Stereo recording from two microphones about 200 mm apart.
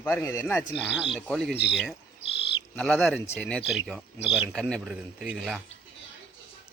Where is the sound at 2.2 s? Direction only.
30° left (ahead or behind).